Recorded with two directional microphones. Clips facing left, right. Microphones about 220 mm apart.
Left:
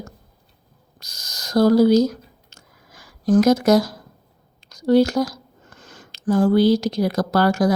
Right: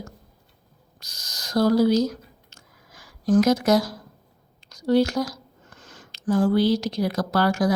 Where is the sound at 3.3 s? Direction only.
40° left (ahead or behind).